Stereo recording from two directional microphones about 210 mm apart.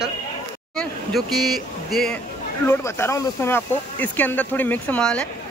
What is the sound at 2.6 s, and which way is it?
Speech, 10° left (ahead or behind).